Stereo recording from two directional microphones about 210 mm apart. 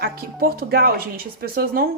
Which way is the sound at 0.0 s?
45° right (ahead or behind).